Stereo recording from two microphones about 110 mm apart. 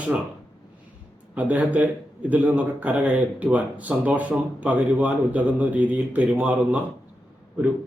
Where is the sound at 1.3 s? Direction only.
15° right (ahead or behind).